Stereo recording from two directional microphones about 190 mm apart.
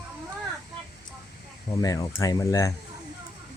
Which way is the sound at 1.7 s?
20° left (ahead or behind).